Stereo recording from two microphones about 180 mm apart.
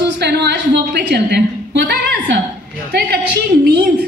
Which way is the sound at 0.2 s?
65° right (ahead or behind).